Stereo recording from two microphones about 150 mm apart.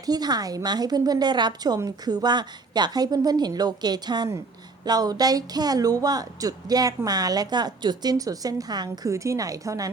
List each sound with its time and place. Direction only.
0.0 s speech: 25° right (ahead or behind)